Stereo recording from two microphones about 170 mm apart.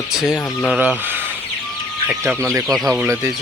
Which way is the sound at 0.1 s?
5° right (ahead or behind).